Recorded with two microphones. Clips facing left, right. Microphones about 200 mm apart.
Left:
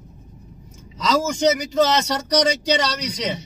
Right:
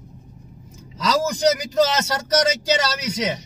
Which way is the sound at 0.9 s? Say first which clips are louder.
Left 1 dB; centre (ahead or behind).